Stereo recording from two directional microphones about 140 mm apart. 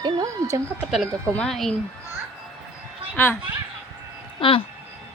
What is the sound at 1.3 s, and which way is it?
Speech, 5° left (ahead or behind).